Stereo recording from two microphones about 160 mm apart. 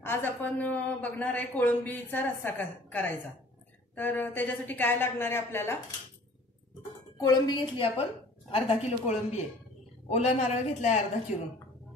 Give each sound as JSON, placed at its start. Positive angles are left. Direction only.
{"t": 0.0, "sound": "a woman's voice", "side_deg": 15}
{"t": 7.2, "sound": "a woman's voice", "side_deg": 25}
{"t": 8.5, "sound": "a woman's voice", "side_deg": 45}